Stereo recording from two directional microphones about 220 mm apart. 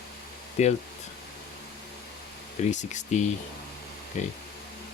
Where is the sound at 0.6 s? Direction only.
30° left (ahead or behind).